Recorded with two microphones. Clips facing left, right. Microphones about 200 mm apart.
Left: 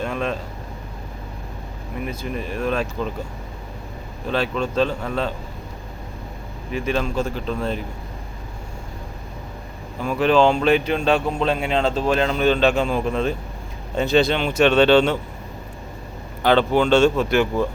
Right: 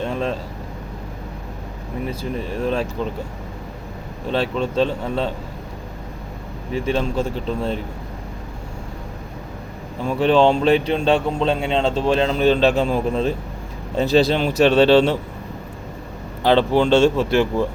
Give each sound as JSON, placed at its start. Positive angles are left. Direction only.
{"t": 0.0, "sound": "a sound", "side_deg": -30}
{"t": 2.0, "sound": "speech", "side_deg": -30}
{"t": 4.3, "sound": "speech", "side_deg": -30}
{"t": 6.7, "sound": "speech", "side_deg": -30}
{"t": 10.0, "sound": "speech", "side_deg": -30}
{"t": 16.4, "sound": "speech", "side_deg": -30}